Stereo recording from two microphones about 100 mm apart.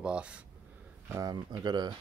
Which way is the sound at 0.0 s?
10° right (ahead or behind).